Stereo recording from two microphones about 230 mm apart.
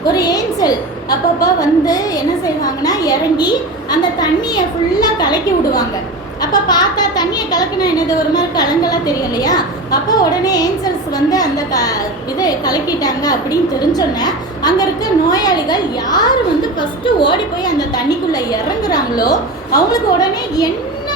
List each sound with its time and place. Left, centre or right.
0.1 s speech: centre